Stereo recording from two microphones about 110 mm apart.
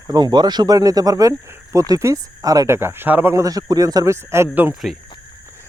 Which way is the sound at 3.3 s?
30° right (ahead or behind).